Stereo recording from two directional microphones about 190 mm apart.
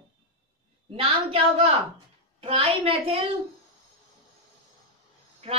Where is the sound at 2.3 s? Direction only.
30° right (ahead or behind).